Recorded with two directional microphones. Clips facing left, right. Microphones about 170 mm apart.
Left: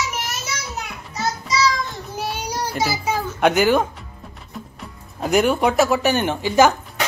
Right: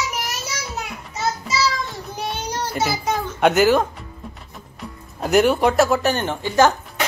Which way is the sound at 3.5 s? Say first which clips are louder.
Right 1 dB; centre (ahead or behind).